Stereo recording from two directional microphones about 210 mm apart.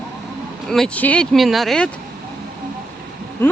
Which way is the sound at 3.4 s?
10° left (ahead or behind).